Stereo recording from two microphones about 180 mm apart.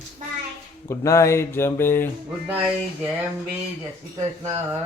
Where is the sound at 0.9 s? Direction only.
15° left (ahead or behind).